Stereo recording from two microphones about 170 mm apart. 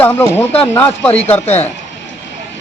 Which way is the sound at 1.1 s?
40° left (ahead or behind).